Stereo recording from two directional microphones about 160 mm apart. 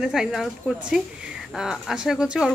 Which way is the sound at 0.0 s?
5° right (ahead or behind).